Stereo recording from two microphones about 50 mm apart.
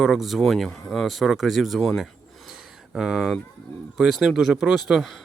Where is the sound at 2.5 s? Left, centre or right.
Centre.